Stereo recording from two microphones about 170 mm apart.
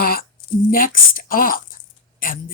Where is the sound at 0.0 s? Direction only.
60° left (ahead or behind).